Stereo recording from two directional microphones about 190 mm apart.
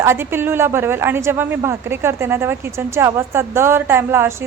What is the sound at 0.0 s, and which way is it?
A woman's voice, 10° right (ahead or behind).